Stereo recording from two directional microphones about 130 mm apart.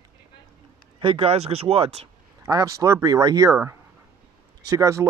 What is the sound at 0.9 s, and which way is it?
Speech, 40° right (ahead or behind).